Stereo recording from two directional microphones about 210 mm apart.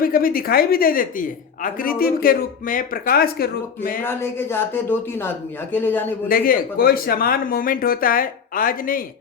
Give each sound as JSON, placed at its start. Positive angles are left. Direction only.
{"t": 0.0, "sound": "a man's voice", "side_deg": 45}
{"t": 4.0, "sound": "speech", "side_deg": 10}
{"t": 6.2, "sound": "a man's voice", "side_deg": 45}